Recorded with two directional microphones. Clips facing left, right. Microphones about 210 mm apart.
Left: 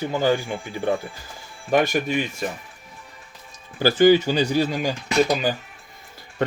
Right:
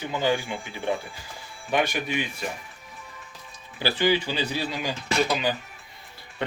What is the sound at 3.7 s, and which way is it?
Speech, 45° left (ahead or behind).